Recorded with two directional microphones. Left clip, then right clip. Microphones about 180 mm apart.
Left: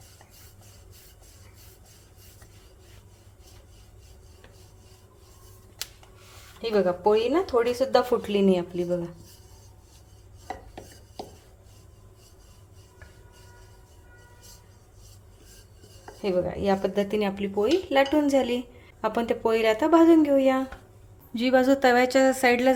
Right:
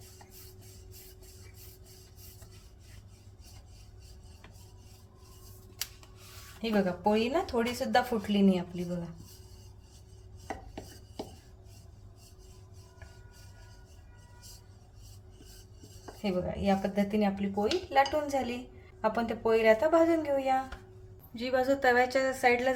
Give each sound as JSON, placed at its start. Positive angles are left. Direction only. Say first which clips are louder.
{"t": 6.6, "sound": "speech", "louder": "left 7 dB", "side_deg": 35}
{"t": 16.2, "sound": "speech", "louder": "left 6 dB", "side_deg": 45}